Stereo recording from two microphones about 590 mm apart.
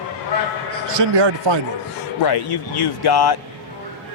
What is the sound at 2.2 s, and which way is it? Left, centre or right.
Speech, left.